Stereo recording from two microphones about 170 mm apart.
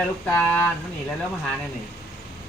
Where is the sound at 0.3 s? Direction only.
10° left (ahead or behind).